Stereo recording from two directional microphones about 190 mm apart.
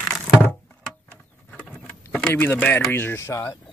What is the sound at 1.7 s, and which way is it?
Speech, 10° left (ahead or behind).